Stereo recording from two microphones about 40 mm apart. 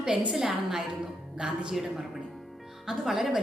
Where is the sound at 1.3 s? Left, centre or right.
Right.